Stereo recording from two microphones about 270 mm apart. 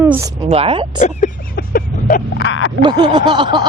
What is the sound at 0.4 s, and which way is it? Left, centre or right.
Speech, right.